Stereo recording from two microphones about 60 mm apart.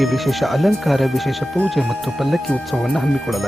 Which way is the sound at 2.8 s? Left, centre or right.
Centre.